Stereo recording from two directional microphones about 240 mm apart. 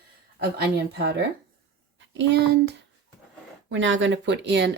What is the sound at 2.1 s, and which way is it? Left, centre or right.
Speech, right.